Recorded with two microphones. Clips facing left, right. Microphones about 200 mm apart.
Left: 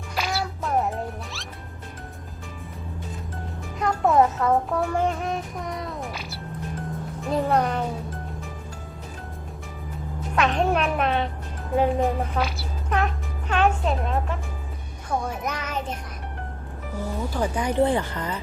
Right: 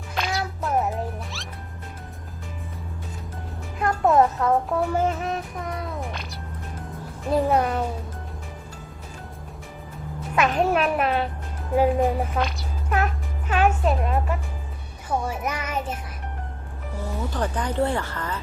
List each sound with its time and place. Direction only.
0.1 s music: 5° left (ahead or behind)
3.8 s a child's voice: centre (ahead or behind)
10.3 s a child's voice: 5° right (ahead or behind)
15.1 s music: 10° right (ahead or behind)
17.3 s speech: 10° left (ahead or behind)